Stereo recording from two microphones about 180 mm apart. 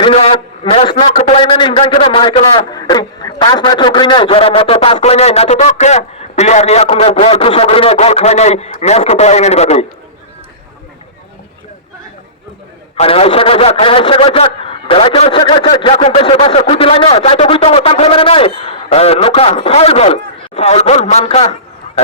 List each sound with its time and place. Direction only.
0.0 s a man's voice: 35° left (ahead or behind)
13.0 s a man's voice: 35° left (ahead or behind)